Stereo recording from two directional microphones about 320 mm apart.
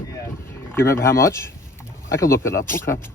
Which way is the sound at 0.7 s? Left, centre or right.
Centre.